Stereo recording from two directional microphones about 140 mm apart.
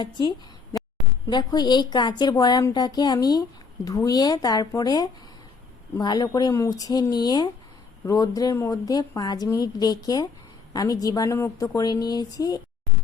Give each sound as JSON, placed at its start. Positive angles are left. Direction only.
{"t": 0.0, "sound": "a woman's voice", "side_deg": 30}